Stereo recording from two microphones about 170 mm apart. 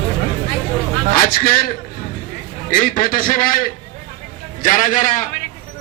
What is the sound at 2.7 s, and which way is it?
A man's voice, 55° left (ahead or behind).